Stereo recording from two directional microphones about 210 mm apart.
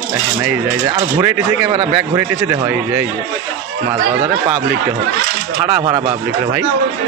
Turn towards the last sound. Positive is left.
turn(degrees=-20)  # may be behind; listen again after turning